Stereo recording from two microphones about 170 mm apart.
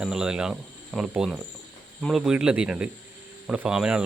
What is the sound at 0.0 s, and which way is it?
Speech, 5° right (ahead or behind).